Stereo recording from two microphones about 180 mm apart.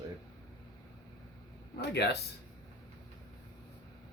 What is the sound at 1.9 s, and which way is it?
Speech, 70° left (ahead or behind).